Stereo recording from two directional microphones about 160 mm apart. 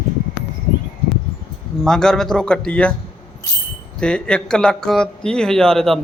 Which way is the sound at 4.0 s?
5° left (ahead or behind).